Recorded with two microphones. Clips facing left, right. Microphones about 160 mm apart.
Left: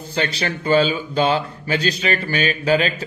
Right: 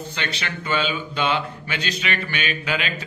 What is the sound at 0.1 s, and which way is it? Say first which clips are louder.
A man's voice: left 12 dB; 35° left (ahead or behind).